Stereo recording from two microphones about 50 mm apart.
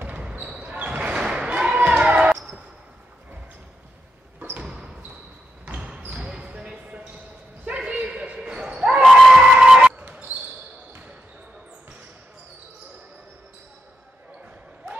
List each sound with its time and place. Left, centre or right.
0.1 s basketball bounce: centre
4.6 s a sound: centre
5.8 s basketball bounce: centre